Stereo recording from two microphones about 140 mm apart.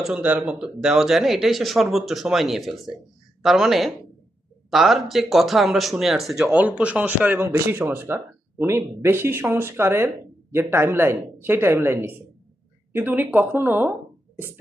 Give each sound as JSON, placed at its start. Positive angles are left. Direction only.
{"t": 0.0, "sound": "speech", "side_deg": -5}